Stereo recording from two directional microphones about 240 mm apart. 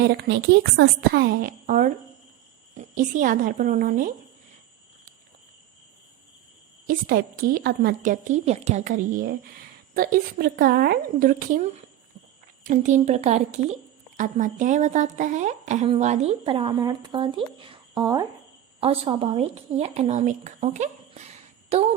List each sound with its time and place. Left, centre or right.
0.1 s a woman's voice: right
6.8 s a woman's voice: right